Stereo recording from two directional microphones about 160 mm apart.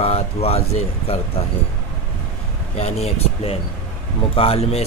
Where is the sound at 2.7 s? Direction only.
40° left (ahead or behind).